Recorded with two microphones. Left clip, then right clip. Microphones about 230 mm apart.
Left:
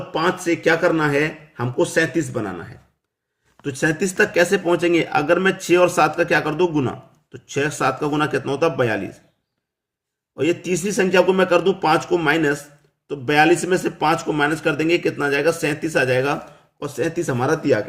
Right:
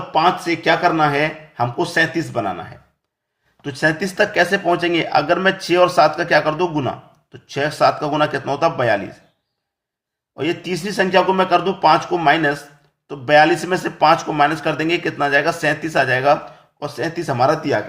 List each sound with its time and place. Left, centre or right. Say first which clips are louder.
0.1 s speech: right 4 dB; left
3.6 s speech: right 2 dB; centre
10.3 s speech: left 1 dB; left